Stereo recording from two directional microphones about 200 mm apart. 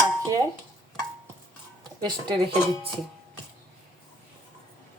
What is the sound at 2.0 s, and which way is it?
Speech, 20° right (ahead or behind).